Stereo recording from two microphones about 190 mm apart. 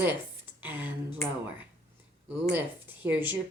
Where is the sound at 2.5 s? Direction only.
10° right (ahead or behind).